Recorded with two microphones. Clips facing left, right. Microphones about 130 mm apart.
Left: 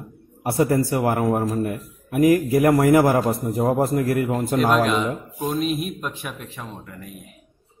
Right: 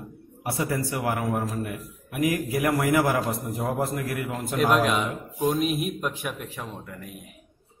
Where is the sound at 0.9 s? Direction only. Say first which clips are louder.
Left 6 dB; 35° left (ahead or behind).